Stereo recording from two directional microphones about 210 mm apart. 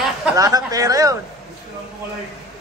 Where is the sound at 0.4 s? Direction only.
15° right (ahead or behind).